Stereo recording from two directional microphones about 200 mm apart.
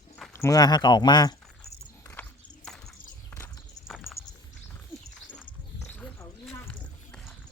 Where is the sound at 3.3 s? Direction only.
15° left (ahead or behind).